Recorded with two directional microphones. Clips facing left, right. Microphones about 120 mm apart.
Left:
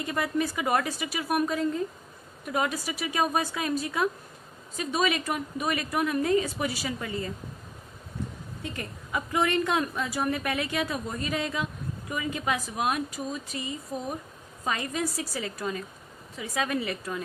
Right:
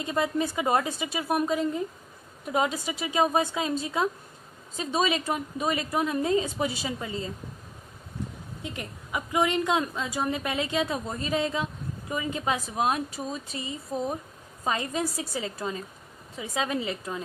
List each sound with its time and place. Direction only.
0.0 s a woman's voice: 25° right (ahead or behind)
8.6 s a woman's voice: 15° right (ahead or behind)